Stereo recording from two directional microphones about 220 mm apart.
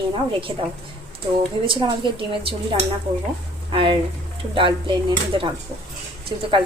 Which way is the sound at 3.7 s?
25° right (ahead or behind).